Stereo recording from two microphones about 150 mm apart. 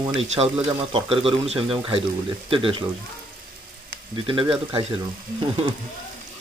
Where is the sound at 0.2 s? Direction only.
40° right (ahead or behind).